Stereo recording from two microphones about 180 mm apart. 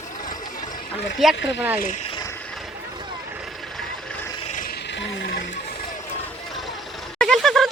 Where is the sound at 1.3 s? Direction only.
80° left.